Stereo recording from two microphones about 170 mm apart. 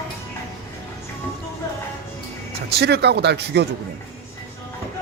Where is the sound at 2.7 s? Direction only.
75° right (ahead or behind).